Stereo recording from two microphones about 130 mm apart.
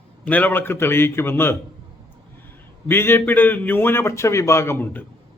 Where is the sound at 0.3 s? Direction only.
15° left (ahead or behind).